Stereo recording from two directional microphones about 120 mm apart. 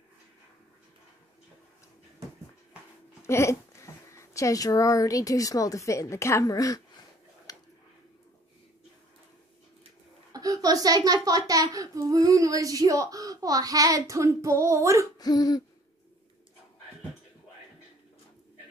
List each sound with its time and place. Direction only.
3.2 s speech: 20° left (ahead or behind)
7.5 s a sound: 30° left (ahead or behind)
10.3 s a child's voice: 30° right (ahead or behind)
15.1 s speech: 35° left (ahead or behind)